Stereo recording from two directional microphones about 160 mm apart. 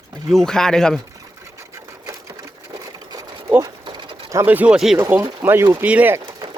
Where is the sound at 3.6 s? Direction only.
25° right (ahead or behind).